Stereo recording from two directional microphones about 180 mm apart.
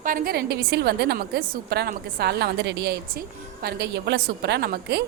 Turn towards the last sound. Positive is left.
turn(degrees=-60)  # may be behind; listen again after turning